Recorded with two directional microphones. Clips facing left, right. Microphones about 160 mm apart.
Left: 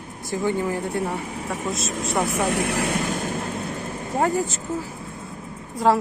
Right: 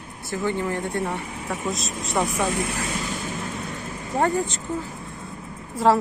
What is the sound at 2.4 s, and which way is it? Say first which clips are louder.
Speech: left 3 dB; 65° left (ahead or behind).